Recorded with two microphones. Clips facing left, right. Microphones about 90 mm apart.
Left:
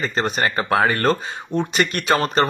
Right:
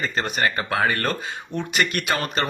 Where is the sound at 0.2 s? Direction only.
30° left (ahead or behind).